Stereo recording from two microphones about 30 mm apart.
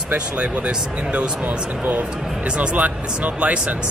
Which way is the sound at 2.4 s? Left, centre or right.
Right.